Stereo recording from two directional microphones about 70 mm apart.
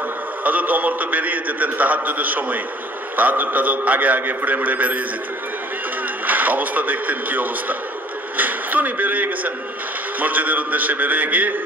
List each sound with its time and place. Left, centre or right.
0.4 s a man's voice: right
6.2 s a man's voice: right